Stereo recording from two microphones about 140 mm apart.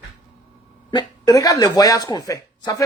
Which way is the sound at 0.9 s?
30° left (ahead or behind).